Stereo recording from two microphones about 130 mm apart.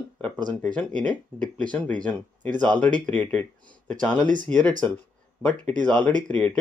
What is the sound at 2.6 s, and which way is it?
Speech, 10° left (ahead or behind).